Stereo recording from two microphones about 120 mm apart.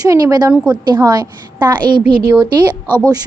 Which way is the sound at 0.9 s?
35° right (ahead or behind).